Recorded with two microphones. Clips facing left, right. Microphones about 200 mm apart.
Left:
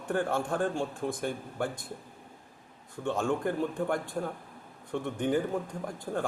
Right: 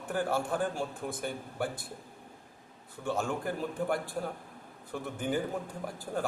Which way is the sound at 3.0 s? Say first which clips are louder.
Left 3 dB; 5° right (ahead or behind).